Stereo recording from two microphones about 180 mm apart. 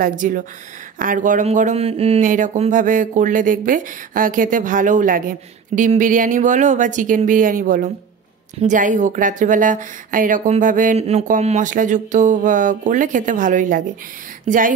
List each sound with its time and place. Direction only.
0.0 s speech: 50° right (ahead or behind)